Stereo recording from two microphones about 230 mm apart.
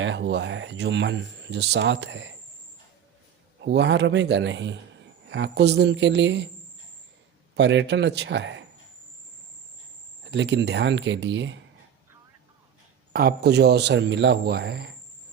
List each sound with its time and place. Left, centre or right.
0.0 s speech: right
3.6 s speech: right
7.5 s speech: right
10.3 s speech: right
13.1 s speech: right